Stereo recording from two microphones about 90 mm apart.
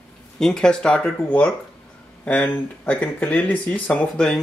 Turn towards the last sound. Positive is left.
turn(degrees=15)  # may be behind; listen again after turning